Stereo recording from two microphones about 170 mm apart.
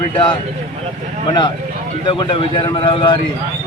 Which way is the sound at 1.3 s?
30° left (ahead or behind).